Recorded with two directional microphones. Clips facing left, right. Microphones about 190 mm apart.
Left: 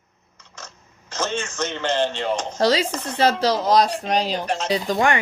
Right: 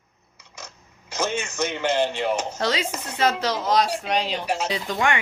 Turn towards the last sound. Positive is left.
turn(degrees=35)  # may be behind; listen again after turning